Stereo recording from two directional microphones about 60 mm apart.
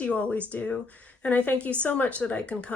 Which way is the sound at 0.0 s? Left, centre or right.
Left.